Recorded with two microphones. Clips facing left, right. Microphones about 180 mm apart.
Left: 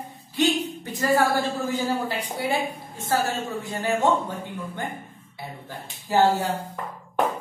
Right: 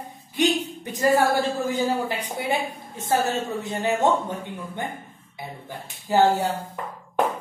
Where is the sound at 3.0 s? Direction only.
20° right (ahead or behind).